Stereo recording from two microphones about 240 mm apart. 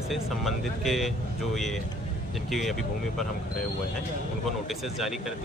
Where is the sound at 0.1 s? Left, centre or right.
Centre.